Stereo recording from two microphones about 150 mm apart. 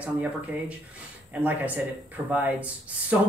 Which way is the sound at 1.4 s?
10° right (ahead or behind).